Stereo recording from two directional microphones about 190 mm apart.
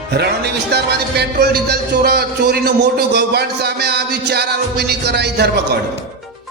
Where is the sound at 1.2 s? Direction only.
60° right (ahead or behind).